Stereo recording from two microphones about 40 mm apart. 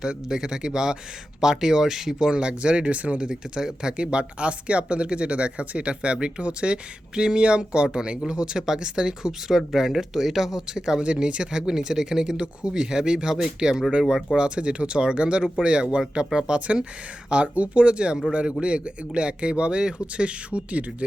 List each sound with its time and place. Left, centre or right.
0.0 s speech: centre; by 3.2 s right
3.2 s speech: centre
14.0 s speech: centre
14.3 s speech: right